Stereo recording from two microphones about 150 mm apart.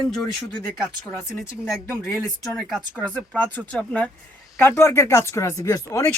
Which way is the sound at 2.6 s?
Centre (ahead or behind).